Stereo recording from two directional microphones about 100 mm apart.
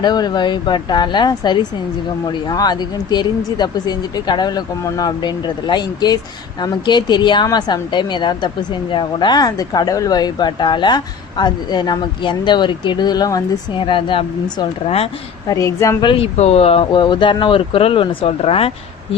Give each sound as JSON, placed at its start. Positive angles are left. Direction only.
{"t": 0.0, "sound": "speech", "side_deg": 45}
{"t": 13.7, "sound": "speech", "side_deg": 60}
{"t": 15.4, "sound": "speech", "side_deg": 30}
{"t": 16.0, "sound": "speech", "side_deg": 55}
{"t": 16.2, "sound": "speech", "side_deg": 80}